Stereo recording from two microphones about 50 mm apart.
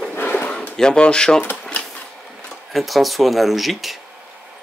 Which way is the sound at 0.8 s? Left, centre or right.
Centre.